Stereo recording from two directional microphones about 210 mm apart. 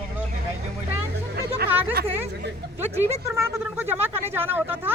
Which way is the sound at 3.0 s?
30° right (ahead or behind).